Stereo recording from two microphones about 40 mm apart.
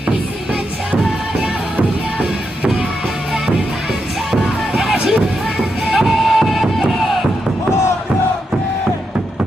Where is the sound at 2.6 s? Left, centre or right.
Centre.